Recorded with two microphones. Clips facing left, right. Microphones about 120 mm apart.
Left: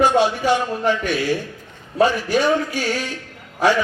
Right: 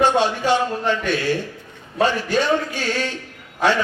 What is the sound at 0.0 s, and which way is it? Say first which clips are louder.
A man's voice: left 1 dB; 10° left (ahead or behind).